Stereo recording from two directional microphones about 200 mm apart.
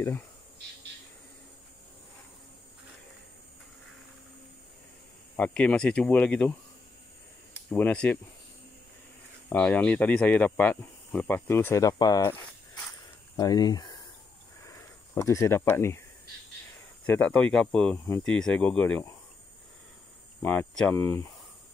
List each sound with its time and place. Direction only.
5.3 s speech: 5° left (ahead or behind)
7.7 s speech: 5° left (ahead or behind)
9.5 s speech: 5° left (ahead or behind)
13.4 s speech: 20° left (ahead or behind)
17.0 s speech: 10° left (ahead or behind)
20.4 s speech: 5° left (ahead or behind)